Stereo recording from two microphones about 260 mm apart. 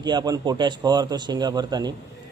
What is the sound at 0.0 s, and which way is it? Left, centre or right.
A man's voice, centre.